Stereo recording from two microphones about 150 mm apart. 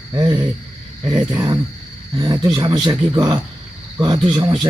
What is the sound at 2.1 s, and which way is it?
A man's voice, 25° right (ahead or behind).